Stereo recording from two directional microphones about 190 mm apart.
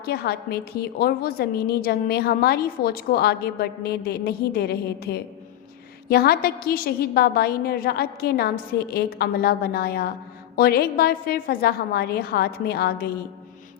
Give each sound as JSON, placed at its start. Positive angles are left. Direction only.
{"t": 0.0, "sound": "a woman's voice", "side_deg": 55}